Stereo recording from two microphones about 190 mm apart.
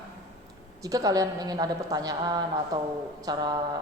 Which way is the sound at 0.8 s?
20° right (ahead or behind).